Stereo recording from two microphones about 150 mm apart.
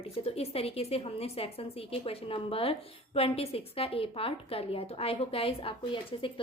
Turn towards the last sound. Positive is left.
turn(degrees=35)  # may be behind; listen again after turning